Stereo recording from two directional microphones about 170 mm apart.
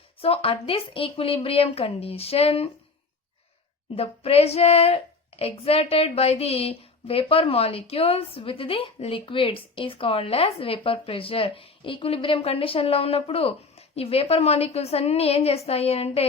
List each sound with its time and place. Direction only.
0.2 s speech: 35° left (ahead or behind)
3.9 s speech: 35° left (ahead or behind)